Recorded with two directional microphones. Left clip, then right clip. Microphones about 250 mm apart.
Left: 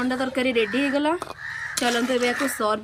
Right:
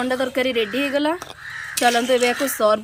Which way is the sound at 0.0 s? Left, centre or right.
Right.